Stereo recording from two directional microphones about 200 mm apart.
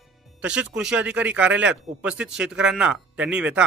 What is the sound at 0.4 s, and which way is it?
Speech, 5° right (ahead or behind).